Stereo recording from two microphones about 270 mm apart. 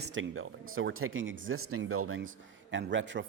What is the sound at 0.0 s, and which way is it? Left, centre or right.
Speech, right.